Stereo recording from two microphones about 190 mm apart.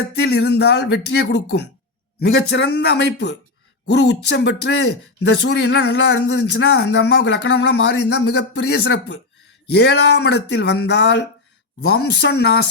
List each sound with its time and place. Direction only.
0.2 s speech: 60° left (ahead or behind)